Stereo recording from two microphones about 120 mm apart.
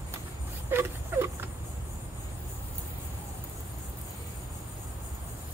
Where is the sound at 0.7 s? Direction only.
20° right (ahead or behind).